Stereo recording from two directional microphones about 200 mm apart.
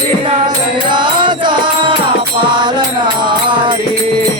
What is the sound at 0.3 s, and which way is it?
Music, 25° right (ahead or behind).